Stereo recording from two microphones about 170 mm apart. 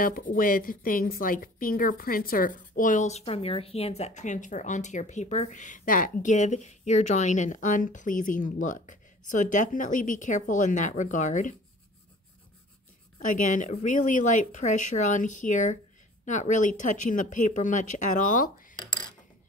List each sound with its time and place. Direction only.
0.0 s a woman's voice: 55° left (ahead or behind)
13.2 s a woman's voice: 50° left (ahead or behind)
18.8 s cutlery: 25° left (ahead or behind)